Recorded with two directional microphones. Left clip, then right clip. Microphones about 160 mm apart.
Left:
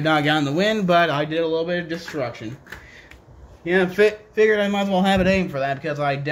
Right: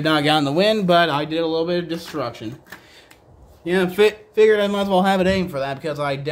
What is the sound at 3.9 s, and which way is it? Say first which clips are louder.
Speech: right 1 dB; 35° right (ahead or behind).